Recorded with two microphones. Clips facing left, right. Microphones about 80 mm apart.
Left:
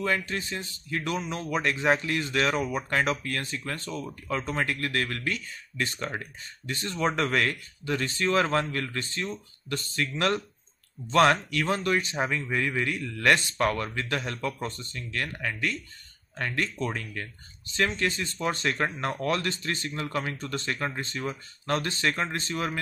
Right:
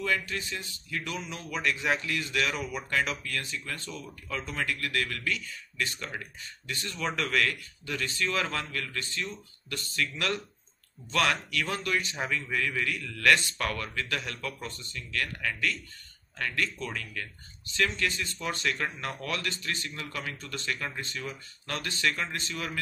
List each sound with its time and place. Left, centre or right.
0.0 s a man's voice: left